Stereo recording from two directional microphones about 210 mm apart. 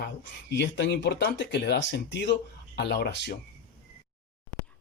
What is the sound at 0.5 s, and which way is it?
Speech, 55° left (ahead or behind).